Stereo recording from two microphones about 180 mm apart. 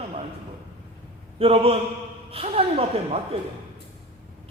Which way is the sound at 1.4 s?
30° right (ahead or behind).